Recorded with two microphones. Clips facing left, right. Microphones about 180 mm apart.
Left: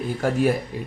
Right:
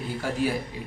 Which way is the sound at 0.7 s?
50° left (ahead or behind).